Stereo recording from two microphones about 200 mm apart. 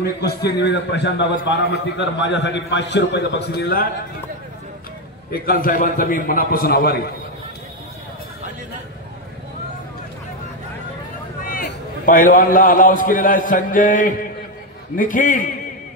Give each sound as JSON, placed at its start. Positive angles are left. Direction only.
{"t": 0.0, "sound": "a man's voice", "side_deg": 55}
{"t": 5.3, "sound": "a man's voice", "side_deg": 45}
{"t": 12.1, "sound": "a man's voice", "side_deg": 40}